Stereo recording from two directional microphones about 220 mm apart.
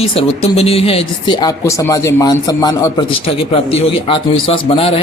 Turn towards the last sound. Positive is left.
turn(degrees=25)  # may be behind; listen again after turning